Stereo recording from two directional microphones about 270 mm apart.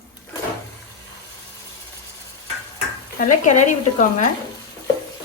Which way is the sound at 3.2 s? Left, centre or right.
Left.